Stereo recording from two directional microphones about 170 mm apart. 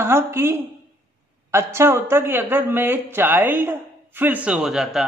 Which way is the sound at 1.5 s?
15° right (ahead or behind).